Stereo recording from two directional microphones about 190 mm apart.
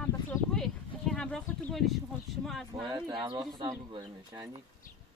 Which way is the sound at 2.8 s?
20° right (ahead or behind).